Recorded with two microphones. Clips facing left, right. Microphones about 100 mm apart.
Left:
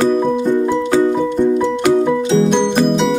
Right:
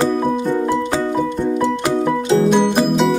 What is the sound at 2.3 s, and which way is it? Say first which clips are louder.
Music: right 2 dB; 5° right (ahead or behind).